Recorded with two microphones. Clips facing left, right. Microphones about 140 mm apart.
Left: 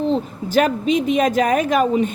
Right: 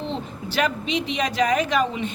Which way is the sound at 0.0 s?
45° left (ahead or behind).